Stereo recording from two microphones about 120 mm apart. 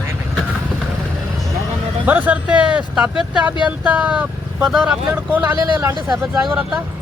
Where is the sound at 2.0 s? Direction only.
10° right (ahead or behind).